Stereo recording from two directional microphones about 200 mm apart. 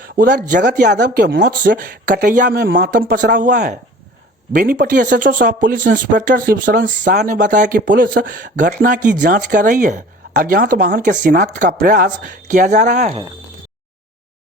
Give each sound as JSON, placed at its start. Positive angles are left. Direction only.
{"t": 0.0, "sound": "speech", "side_deg": -45}